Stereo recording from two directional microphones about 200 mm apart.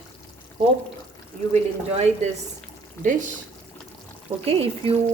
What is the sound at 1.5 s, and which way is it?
Speech, 30° right (ahead or behind).